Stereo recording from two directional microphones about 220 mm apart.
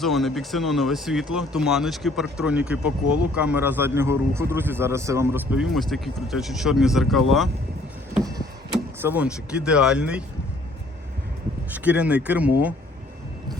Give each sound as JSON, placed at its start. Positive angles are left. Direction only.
{"t": 0.0, "sound": "speech", "side_deg": 0}
{"t": 8.2, "sound": "vehicle", "side_deg": -15}
{"t": 9.0, "sound": "speech", "side_deg": -10}
{"t": 11.7, "sound": "speech", "side_deg": -5}